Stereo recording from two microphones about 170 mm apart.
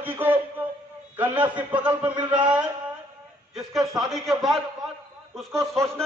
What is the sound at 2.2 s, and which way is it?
Speech, 25° right (ahead or behind).